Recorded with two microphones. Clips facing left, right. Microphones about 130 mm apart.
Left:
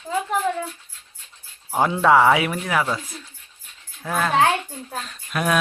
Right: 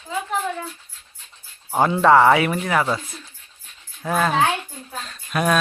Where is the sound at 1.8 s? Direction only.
5° left (ahead or behind).